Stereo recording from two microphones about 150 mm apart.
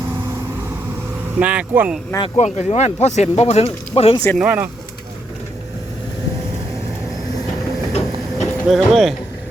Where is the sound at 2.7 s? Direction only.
50° left (ahead or behind).